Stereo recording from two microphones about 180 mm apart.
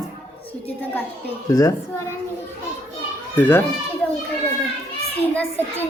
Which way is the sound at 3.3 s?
10° left (ahead or behind).